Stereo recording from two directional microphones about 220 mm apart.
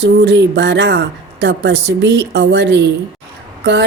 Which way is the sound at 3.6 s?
50° right (ahead or behind).